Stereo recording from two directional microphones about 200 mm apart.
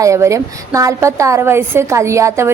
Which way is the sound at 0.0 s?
15° right (ahead or behind).